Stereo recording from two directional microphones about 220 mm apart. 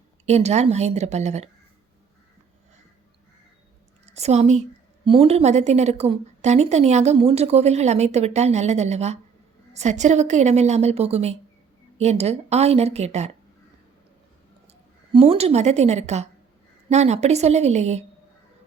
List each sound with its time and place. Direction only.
0.3 s a woman's voice: 30° right (ahead or behind)
4.0 s a woman's voice: 30° right (ahead or behind)
14.7 s a woman's voice: 25° right (ahead or behind)